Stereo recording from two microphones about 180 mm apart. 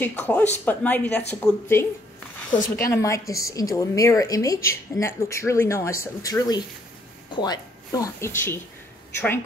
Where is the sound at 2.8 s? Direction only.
15° left (ahead or behind).